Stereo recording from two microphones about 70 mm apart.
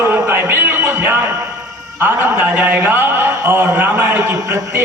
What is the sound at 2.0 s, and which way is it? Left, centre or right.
A man's voice, right.